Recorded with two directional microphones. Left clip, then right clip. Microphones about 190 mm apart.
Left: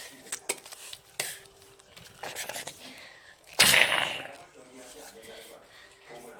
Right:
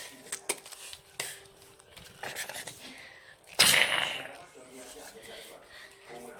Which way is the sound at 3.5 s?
20° left (ahead or behind).